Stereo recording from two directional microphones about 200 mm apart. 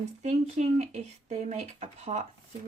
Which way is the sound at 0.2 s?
35° right (ahead or behind).